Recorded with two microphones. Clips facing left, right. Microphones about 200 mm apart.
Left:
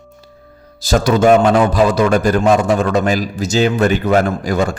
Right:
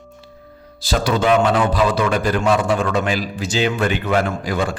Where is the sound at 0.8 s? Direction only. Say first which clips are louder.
Left 6 dB; 45° left (ahead or behind).